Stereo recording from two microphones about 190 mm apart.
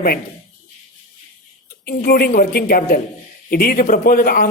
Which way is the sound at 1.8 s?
50° left (ahead or behind).